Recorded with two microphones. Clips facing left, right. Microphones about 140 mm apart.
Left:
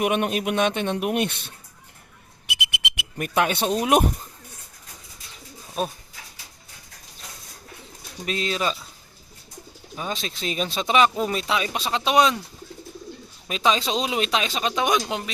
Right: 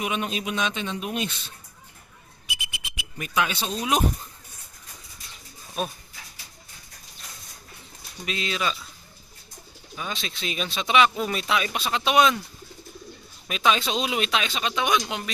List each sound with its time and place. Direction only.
0.0 s speech: 55° left (ahead or behind)
2.5 s a sound: 70° left (ahead or behind)
8.2 s speech: 40° left (ahead or behind)
10.1 s speech: 40° left (ahead or behind)
13.5 s speech: 35° left (ahead or behind)